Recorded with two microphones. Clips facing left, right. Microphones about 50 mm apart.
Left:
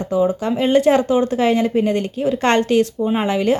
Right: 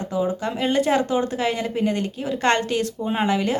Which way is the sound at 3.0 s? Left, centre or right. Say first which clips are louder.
Left 5 dB; centre.